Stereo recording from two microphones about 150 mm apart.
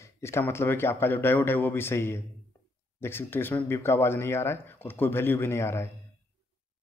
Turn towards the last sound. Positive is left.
turn(degrees=15)  # may be behind; listen again after turning